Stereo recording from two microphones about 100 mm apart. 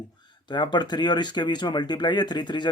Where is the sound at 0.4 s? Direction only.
50° left (ahead or behind).